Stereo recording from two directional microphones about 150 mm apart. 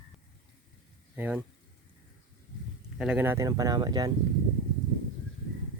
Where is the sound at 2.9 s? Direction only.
10° right (ahead or behind); by 4.1 s 25° right (ahead or behind).